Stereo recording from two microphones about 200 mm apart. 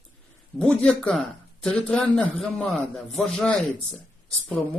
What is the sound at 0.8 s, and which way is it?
A man's voice, 5° left (ahead or behind).